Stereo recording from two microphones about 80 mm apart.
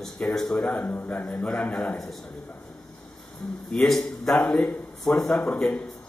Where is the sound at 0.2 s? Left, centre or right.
Centre.